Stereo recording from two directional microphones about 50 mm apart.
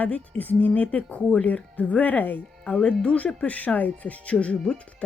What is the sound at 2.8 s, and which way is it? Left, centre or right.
Speech, left.